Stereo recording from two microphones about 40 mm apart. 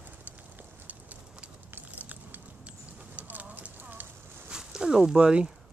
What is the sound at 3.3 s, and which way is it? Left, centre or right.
Clip-clop, right.